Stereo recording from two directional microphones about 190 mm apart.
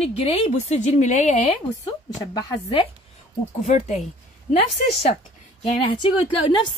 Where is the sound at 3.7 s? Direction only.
35° left (ahead or behind).